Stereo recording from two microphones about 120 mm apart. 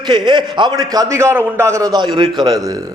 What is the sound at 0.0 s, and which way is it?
A man's voice, 40° right (ahead or behind).